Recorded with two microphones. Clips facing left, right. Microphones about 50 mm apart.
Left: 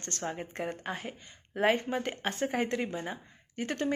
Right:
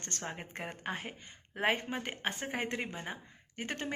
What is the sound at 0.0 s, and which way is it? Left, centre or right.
A woman's voice, right.